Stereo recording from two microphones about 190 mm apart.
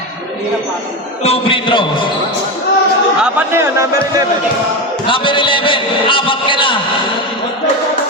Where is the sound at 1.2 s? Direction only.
30° left (ahead or behind).